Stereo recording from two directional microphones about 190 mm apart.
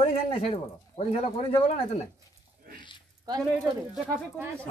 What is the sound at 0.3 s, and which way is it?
Speech, 30° left (ahead or behind).